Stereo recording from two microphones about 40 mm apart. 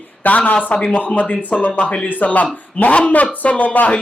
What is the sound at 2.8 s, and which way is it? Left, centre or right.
Speech, left.